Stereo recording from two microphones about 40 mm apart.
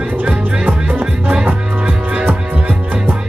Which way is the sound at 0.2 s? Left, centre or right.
Right.